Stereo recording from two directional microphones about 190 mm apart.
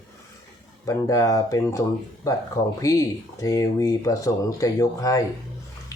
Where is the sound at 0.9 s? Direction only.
15° left (ahead or behind).